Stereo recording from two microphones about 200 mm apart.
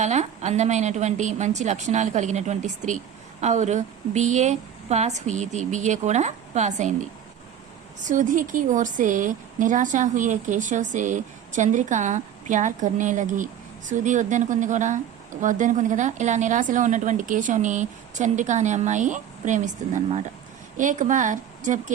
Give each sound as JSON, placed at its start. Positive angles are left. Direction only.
{"t": 0.0, "sound": "a woman's voice", "side_deg": -35}